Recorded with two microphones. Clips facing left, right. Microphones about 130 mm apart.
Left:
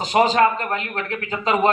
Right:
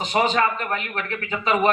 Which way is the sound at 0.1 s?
35° left (ahead or behind).